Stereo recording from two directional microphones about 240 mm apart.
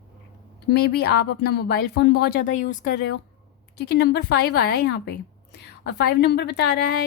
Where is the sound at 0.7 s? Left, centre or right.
Left.